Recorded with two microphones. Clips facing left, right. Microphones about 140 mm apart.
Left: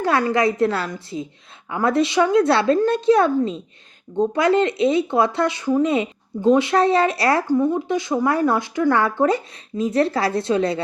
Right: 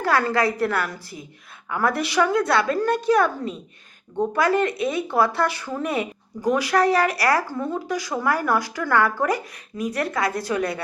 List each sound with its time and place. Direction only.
0.0 s speech: 20° left (ahead or behind)